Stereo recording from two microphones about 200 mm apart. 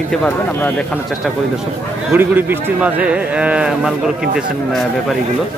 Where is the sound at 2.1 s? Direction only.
10° right (ahead or behind).